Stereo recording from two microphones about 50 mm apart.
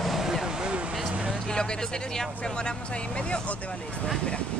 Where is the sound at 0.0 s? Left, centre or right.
Centre.